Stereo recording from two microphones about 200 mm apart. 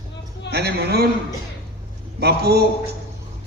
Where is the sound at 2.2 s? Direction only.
55° right (ahead or behind).